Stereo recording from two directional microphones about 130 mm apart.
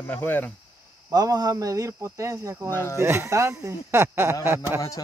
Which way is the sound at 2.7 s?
20° left (ahead or behind).